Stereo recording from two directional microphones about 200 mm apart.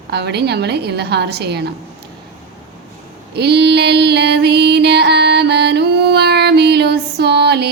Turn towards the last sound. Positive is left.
turn(degrees=-55)  # may be behind; listen again after turning